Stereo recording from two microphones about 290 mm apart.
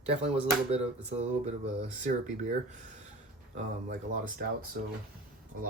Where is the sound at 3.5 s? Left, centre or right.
Right.